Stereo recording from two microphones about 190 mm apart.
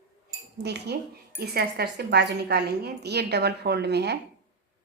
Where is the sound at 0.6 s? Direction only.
60° right (ahead or behind).